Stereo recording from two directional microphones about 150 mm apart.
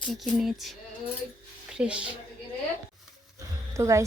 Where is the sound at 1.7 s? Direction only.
5° right (ahead or behind).